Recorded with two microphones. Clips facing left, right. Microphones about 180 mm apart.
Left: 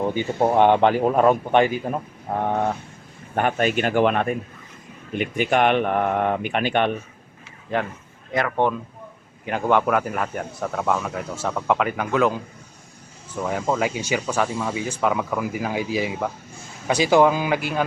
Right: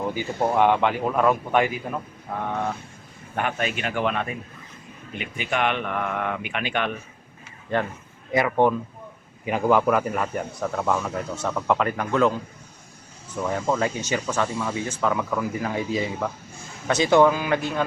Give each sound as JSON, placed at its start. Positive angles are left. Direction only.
{"t": 0.1, "sound": "speech", "side_deg": 25}
{"t": 8.3, "sound": "speech", "side_deg": -10}
{"t": 13.4, "sound": "speech", "side_deg": 5}